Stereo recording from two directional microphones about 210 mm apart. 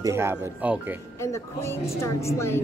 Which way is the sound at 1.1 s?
15° left (ahead or behind).